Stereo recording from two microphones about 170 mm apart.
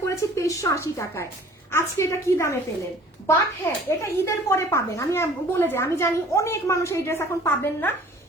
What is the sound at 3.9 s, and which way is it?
A woman's voice, 15° left (ahead or behind).